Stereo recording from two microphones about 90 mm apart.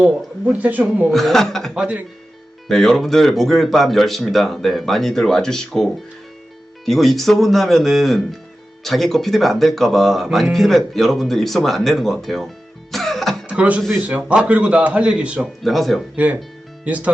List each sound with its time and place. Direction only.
0.0 s speech: 15° right (ahead or behind)
1.1 s speech: 5° left (ahead or behind)
1.7 s speech: 10° right (ahead or behind)
2.6 s speech: 5° left (ahead or behind)
12.9 s music: 5° left (ahead or behind)
13.5 s speech: 15° right (ahead or behind)
15.6 s speech: centre (ahead or behind)
16.1 s speech: 15° right (ahead or behind)